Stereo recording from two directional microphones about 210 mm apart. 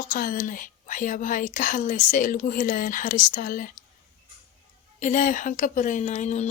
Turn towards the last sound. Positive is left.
turn(degrees=30)  # may be behind; listen again after turning